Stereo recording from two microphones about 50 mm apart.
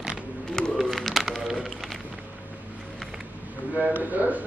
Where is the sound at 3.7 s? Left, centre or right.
Right.